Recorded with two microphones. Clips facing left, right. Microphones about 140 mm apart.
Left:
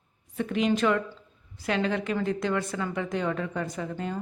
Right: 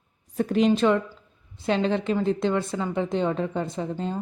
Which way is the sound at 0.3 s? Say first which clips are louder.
Right 5 dB; 35° right (ahead or behind).